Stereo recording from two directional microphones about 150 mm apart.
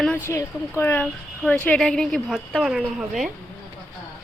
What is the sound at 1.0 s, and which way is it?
A woman's voice, centre (ahead or behind).